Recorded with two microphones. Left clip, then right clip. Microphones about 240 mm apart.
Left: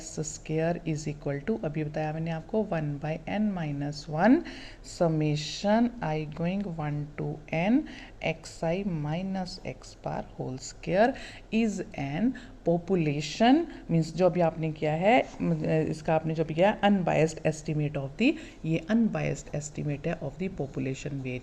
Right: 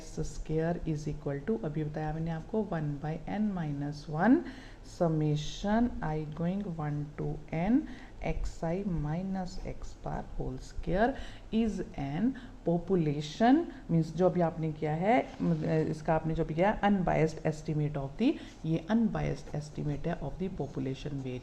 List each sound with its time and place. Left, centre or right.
0.2 s a woman's voice: left